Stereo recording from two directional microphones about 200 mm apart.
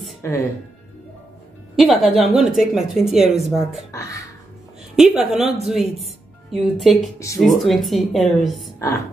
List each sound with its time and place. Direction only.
0.2 s speech: 15° left (ahead or behind)
1.8 s a woman's voice: centre (ahead or behind)
3.9 s speech: 15° left (ahead or behind)
4.9 s a woman's voice: 5° right (ahead or behind)
8.7 s speech: 15° left (ahead or behind)